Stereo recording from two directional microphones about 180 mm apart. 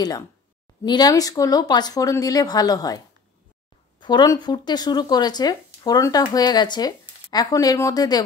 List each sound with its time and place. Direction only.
0.8 s speech: 20° left (ahead or behind)
4.0 s speech: 20° left (ahead or behind)